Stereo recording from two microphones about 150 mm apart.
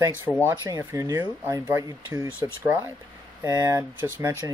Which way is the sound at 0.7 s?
20° right (ahead or behind).